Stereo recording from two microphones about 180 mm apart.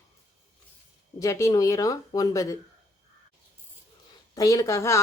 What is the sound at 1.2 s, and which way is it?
A woman's voice, 15° left (ahead or behind).